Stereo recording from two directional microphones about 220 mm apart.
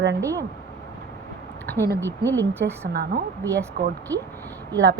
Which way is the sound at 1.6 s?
10° left (ahead or behind).